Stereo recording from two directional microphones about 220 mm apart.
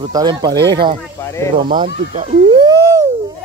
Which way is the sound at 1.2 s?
15° left (ahead or behind).